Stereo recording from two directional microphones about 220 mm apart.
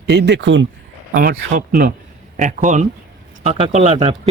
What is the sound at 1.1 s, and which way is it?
Speech, 40° right (ahead or behind).